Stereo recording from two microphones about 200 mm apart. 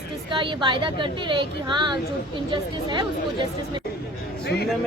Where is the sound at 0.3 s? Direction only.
25° right (ahead or behind).